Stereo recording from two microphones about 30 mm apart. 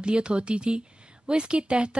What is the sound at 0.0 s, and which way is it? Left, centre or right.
Speech, right.